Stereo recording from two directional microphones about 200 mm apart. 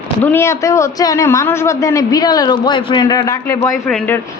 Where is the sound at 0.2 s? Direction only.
10° left (ahead or behind).